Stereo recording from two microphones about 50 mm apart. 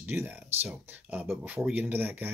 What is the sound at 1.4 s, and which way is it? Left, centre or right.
Speech, right.